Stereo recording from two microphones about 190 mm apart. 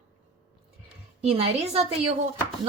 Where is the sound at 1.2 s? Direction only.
30° right (ahead or behind).